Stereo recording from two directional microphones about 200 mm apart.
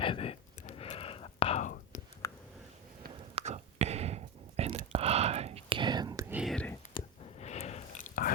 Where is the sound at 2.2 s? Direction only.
15° left (ahead or behind).